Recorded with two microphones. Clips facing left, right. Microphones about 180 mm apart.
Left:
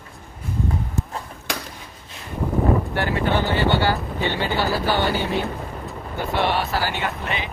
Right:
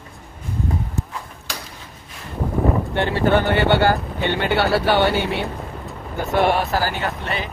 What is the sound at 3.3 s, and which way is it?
Speech, 60° right (ahead or behind).